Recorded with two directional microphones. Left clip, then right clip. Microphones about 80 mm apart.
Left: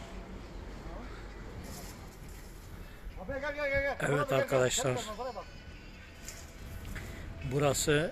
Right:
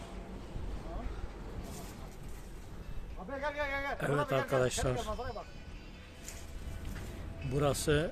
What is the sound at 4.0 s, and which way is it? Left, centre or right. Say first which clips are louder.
Speech: left 2 dB; centre.